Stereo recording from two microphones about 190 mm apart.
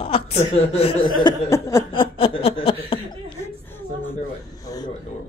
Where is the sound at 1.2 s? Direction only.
20° left (ahead or behind).